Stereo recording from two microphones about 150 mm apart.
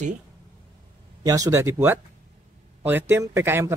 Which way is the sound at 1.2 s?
25° right (ahead or behind).